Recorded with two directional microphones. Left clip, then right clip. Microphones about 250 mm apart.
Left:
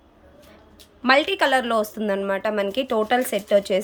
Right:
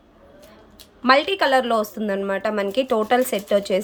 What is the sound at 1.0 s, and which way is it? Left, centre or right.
A woman's voice, centre.